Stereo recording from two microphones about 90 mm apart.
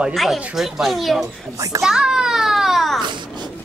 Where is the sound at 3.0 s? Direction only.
60° right (ahead or behind).